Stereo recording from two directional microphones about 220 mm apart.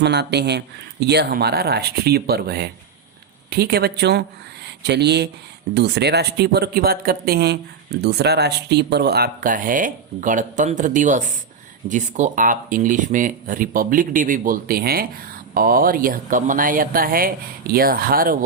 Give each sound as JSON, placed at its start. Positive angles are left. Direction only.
{"t": 0.0, "sound": "speech", "side_deg": -50}